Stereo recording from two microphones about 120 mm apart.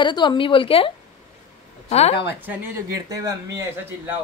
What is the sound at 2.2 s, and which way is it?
Speech, 15° right (ahead or behind).